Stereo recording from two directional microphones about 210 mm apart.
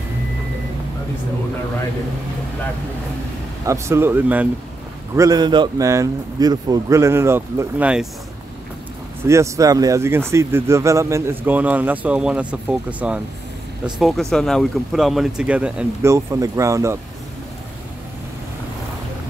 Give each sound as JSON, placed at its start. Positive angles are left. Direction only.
{"t": 3.6, "sound": "speech", "side_deg": -15}
{"t": 9.2, "sound": "speech", "side_deg": -15}